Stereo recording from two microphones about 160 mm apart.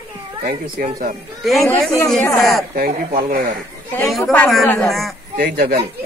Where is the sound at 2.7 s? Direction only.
65° right (ahead or behind).